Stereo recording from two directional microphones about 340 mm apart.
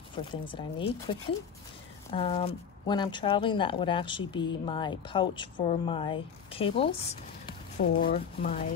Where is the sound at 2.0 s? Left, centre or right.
Centre.